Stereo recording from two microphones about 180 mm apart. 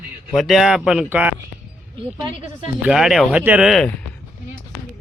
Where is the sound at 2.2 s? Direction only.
25° right (ahead or behind).